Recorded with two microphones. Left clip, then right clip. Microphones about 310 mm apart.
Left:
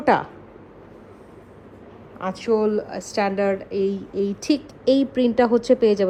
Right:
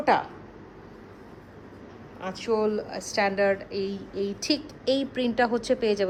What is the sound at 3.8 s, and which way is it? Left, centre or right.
A woman's voice, centre.